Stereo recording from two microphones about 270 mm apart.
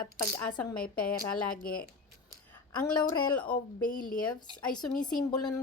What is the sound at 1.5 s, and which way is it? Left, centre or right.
Speech, left.